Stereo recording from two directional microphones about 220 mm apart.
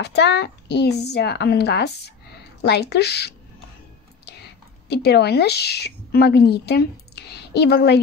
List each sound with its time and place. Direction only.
0.0 s a child's voice: 50° left (ahead or behind)